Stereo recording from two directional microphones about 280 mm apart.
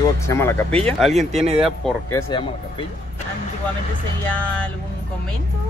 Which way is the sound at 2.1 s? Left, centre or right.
Centre.